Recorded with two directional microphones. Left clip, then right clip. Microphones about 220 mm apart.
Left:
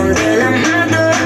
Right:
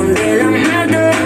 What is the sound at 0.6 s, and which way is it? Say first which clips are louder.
Music: even; 40° right (ahead or behind).